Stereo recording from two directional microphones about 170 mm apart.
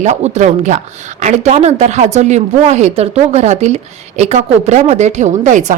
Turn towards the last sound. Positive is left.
turn(degrees=-45)  # may be behind; listen again after turning